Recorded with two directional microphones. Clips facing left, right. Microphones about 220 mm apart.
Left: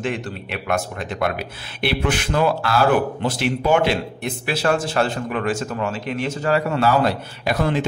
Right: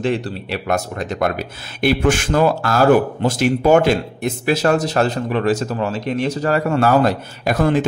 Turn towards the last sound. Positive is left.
turn(degrees=-50)  # may be behind; listen again after turning